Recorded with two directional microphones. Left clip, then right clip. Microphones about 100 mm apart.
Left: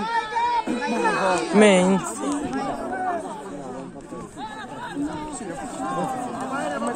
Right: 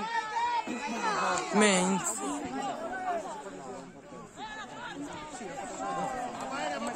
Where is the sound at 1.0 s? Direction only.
10° right (ahead or behind).